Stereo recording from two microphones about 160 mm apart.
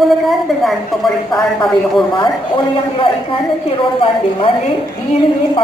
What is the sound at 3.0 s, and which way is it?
A woman's voice, 35° left (ahead or behind).